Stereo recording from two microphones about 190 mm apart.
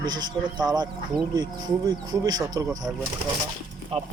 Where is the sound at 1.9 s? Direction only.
20° right (ahead or behind).